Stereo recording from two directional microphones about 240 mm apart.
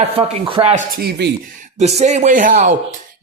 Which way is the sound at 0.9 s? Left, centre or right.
Right.